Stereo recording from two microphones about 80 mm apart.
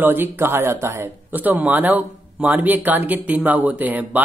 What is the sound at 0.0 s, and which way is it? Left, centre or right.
Speech, right.